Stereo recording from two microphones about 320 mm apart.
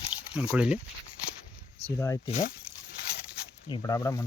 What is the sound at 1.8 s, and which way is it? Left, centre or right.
Speech, centre.